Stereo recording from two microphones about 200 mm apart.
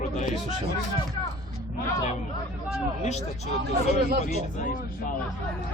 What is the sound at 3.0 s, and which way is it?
Speech, 35° left (ahead or behind).